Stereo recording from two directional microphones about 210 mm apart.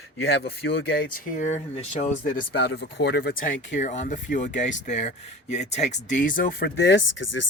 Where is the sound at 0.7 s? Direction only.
50° left (ahead or behind).